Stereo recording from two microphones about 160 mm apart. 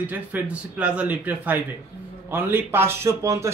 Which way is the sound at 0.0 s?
10° right (ahead or behind).